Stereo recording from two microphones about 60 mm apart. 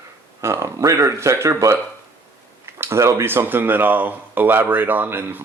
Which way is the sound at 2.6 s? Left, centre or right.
Right.